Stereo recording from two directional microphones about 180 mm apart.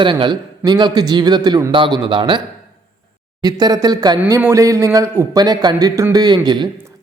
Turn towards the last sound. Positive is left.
turn(degrees=-25)  # may be behind; listen again after turning